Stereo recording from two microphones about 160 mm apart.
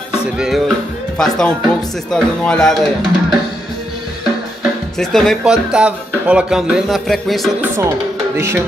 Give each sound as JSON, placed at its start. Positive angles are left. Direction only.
{"t": 0.4, "sound": "speech", "side_deg": 0}
{"t": 4.9, "sound": "speech", "side_deg": 5}
{"t": 7.6, "sound": "speech", "side_deg": -15}